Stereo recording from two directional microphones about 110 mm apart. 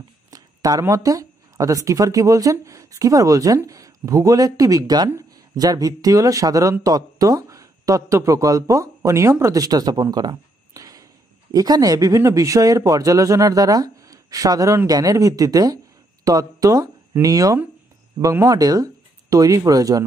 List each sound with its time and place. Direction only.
0.3 s speech: 35° right (ahead or behind)
10.1 s a sound: 35° right (ahead or behind)
11.5 s speech: 35° right (ahead or behind)